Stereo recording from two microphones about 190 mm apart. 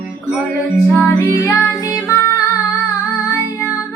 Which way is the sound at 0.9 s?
15° left (ahead or behind).